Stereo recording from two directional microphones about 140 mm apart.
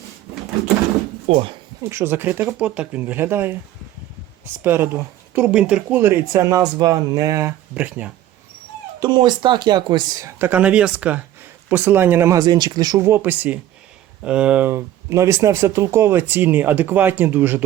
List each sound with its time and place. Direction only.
1.8 s speech: 20° right (ahead or behind)
7.8 s speech: 10° right (ahead or behind)
9.0 s speech: 30° right (ahead or behind)
13.1 s speech: 15° right (ahead or behind)